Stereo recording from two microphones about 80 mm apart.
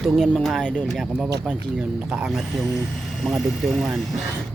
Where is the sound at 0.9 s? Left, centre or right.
Centre.